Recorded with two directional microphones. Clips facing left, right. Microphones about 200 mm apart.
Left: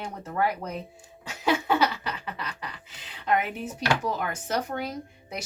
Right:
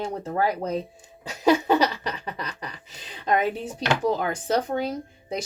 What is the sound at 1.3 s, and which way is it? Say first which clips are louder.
Laughter: right 5 dB; 35° right (ahead or behind).